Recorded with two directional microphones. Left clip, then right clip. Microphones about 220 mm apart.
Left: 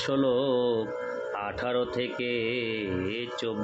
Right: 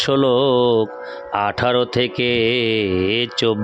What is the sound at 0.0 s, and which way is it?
Speech, 45° right (ahead or behind).